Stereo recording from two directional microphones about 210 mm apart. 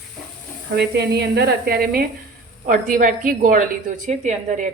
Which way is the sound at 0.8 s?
50° right (ahead or behind).